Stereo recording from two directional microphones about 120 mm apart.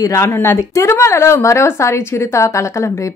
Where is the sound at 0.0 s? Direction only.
25° left (ahead or behind).